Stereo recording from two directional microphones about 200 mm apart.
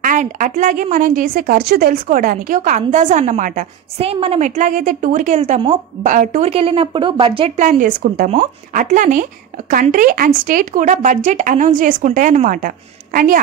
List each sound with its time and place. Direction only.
0.0 s a woman's voice: 40° right (ahead or behind)